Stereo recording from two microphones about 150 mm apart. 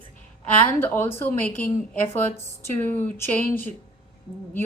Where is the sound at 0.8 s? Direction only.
15° left (ahead or behind).